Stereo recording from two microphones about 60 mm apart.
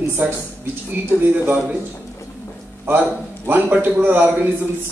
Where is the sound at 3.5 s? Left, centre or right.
Right.